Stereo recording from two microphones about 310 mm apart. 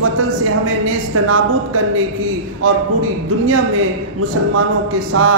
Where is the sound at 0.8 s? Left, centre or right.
Right.